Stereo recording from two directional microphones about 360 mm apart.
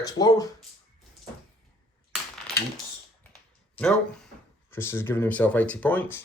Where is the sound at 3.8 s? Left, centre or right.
Centre.